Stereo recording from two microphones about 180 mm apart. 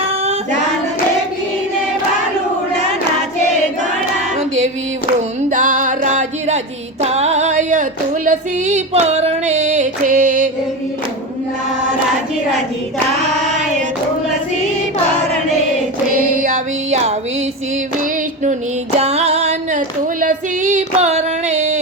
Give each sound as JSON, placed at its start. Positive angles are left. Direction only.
{"t": 5.5, "sound": "music", "side_deg": -45}
{"t": 7.0, "sound": "female singing", "side_deg": -35}
{"t": 13.1, "sound": "singing", "side_deg": -40}
{"t": 18.9, "sound": "female singing", "side_deg": -35}